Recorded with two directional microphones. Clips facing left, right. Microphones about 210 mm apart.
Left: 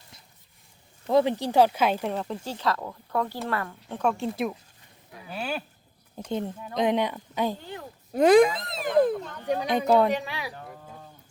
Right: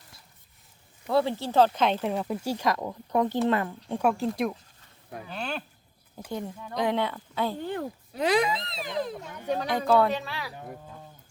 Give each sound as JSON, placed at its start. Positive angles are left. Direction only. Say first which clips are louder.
{"t": 1.0, "sound": "speech", "louder": "left 3 dB", "side_deg": 15}
{"t": 2.0, "sound": "speech", "louder": "right 2 dB", "side_deg": -10}
{"t": 6.3, "sound": "speech", "louder": "left 3 dB", "side_deg": 20}
{"t": 7.6, "sound": "speech", "louder": "right 8 dB", "side_deg": -55}
{"t": 8.1, "sound": "speech", "louder": "left 8 dB", "side_deg": 50}
{"t": 9.2, "sound": "speech", "louder": "left 1 dB", "side_deg": -10}
{"t": 9.5, "sound": "speech", "louder": "left 2 dB", "side_deg": 15}